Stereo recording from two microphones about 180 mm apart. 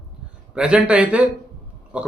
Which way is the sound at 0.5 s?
5° right (ahead or behind).